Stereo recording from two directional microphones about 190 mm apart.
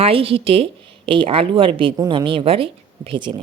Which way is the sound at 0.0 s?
30° right (ahead or behind).